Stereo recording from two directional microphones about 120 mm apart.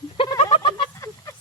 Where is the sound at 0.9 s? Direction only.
25° left (ahead or behind).